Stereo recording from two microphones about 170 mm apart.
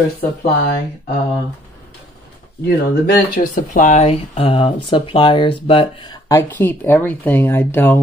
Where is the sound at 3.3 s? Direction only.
50° left (ahead or behind); by 8.0 s 15° left (ahead or behind).